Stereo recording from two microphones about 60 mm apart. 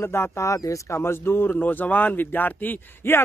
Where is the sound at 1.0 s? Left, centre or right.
Left.